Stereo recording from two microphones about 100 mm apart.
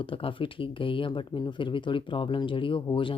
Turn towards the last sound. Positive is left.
turn(degrees=60)  # may be behind; listen again after turning